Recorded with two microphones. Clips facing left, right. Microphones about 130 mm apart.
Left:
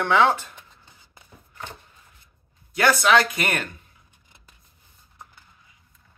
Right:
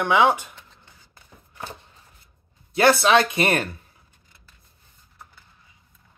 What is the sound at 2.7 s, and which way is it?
Speech, 30° right (ahead or behind).